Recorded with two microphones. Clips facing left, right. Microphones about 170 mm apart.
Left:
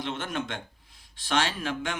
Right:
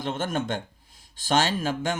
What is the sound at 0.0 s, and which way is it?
Speech, 45° right (ahead or behind).